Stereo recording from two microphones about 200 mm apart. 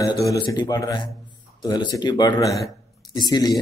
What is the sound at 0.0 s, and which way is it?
A man's voice, 15° left (ahead or behind).